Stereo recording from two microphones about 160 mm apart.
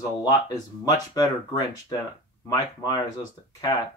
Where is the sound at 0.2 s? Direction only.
20° left (ahead or behind).